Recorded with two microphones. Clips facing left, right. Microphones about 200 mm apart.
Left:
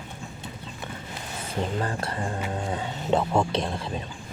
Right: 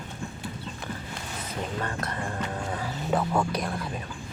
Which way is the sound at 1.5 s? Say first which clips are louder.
Left 4 dB; 30° left (ahead or behind).